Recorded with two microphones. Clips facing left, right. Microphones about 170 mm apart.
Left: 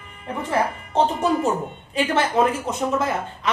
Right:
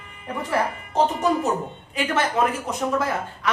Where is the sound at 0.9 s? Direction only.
30° left (ahead or behind).